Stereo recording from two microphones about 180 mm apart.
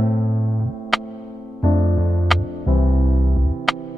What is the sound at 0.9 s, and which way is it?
Music, centre (ahead or behind).